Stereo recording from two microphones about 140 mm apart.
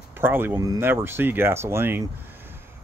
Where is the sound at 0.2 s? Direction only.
15° right (ahead or behind).